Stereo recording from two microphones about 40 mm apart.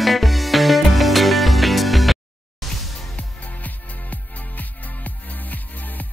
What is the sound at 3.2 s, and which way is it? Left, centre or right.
Music, left.